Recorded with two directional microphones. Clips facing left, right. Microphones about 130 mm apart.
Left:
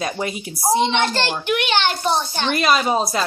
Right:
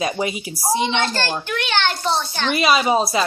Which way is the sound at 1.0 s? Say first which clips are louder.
Left 2 dB; 20° left (ahead or behind).